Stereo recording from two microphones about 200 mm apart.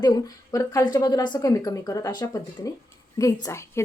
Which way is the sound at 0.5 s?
15° left (ahead or behind).